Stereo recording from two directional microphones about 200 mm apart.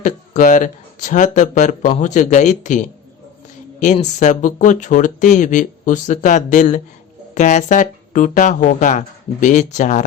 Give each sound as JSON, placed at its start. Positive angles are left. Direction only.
{"t": 0.0, "sound": "speech", "side_deg": 40}